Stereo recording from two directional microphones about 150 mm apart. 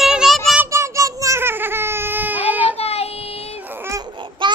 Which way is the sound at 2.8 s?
40° left (ahead or behind).